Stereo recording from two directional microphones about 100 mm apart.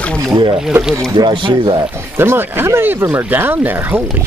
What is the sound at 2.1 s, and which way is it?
Speech, 25° right (ahead or behind).